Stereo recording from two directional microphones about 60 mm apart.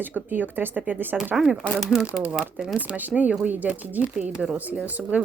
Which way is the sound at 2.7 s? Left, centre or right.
Right.